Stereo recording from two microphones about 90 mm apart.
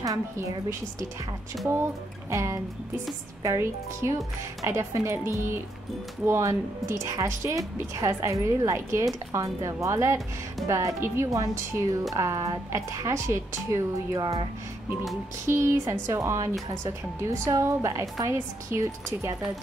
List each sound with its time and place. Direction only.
0.0 s speech: 40° right (ahead or behind)
2.3 s a woman's voice: 35° right (ahead or behind)
15.4 s a woman's voice: 35° right (ahead or behind)